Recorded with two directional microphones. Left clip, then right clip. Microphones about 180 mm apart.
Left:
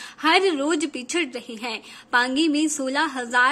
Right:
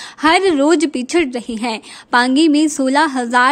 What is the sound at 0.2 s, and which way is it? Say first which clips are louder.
A woman's voice: right 7 dB; 45° right (ahead or behind).